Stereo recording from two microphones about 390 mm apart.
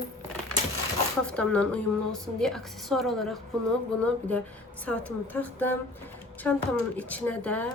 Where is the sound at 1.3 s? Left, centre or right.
Centre.